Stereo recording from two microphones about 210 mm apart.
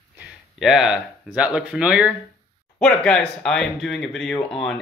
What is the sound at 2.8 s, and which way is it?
Speech, 5° left (ahead or behind).